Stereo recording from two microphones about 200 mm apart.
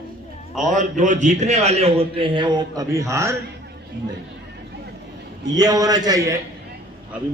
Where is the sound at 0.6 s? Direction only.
40° right (ahead or behind); by 3.4 s 15° right (ahead or behind).